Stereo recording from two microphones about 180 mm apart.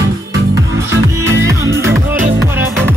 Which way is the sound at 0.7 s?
15° right (ahead or behind).